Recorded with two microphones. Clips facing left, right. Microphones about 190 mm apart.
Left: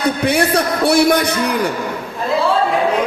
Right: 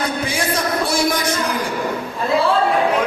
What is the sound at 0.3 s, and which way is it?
A man's voice, 65° left (ahead or behind).